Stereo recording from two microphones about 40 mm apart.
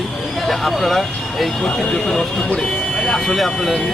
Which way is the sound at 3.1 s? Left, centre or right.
Centre.